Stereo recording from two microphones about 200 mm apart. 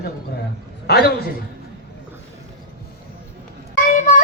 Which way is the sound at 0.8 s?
55° left (ahead or behind).